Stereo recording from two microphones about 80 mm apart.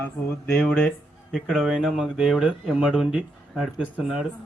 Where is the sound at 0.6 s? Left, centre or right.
Centre.